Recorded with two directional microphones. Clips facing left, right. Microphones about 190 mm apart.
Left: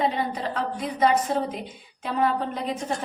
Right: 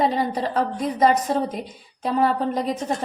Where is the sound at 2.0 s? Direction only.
40° right (ahead or behind).